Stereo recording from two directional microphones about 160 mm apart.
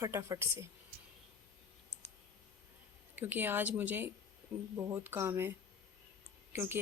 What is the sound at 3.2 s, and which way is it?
Speech, 10° right (ahead or behind).